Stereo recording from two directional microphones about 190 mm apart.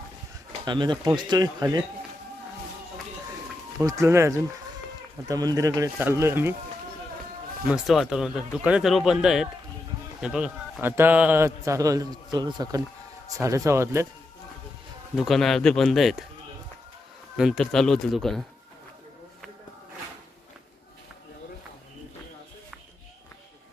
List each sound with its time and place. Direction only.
0.6 s speech: 25° right (ahead or behind)
3.8 s a man's voice: 15° right (ahead or behind)
7.7 s a man's voice: centre (ahead or behind)
15.1 s speech: centre (ahead or behind)
17.3 s speech: centre (ahead or behind)